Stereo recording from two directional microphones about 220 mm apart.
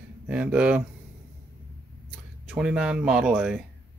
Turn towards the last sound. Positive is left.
turn(degrees=-5)  # may be behind; listen again after turning